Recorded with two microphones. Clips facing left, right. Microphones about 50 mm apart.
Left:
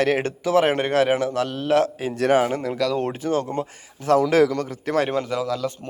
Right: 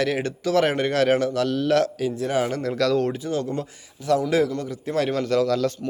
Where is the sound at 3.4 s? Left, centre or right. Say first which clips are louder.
Left 1 dB; left.